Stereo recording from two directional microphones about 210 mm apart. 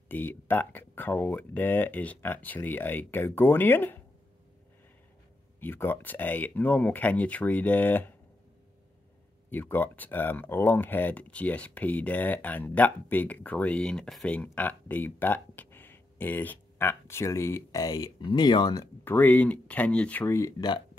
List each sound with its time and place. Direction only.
0.1 s speech: 10° left (ahead or behind)
5.6 s speech: 10° left (ahead or behind)
9.5 s speech: 10° left (ahead or behind)